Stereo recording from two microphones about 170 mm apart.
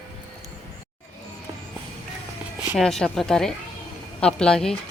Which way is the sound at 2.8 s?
Centre (ahead or behind).